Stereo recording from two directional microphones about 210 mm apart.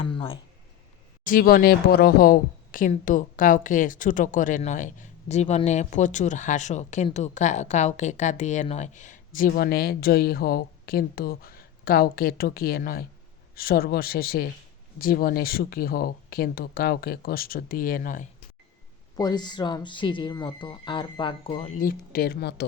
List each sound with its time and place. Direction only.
0.0 s a sound: 25° left (ahead or behind)
1.2 s speech: 45° left (ahead or behind)
19.1 s speech: 20° left (ahead or behind)
22.1 s speech: 50° left (ahead or behind)